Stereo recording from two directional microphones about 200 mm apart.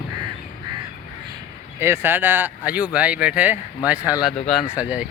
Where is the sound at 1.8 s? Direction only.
10° right (ahead or behind).